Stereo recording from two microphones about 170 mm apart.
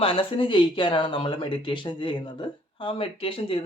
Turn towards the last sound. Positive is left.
turn(degrees=30)  # may be behind; listen again after turning